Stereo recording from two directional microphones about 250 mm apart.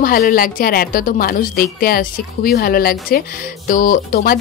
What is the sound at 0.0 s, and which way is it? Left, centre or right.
A woman's voice, left.